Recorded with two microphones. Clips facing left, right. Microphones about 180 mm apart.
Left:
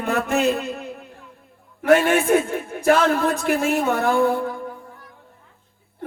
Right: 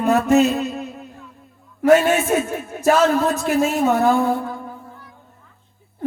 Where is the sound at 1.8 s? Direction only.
55° left (ahead or behind).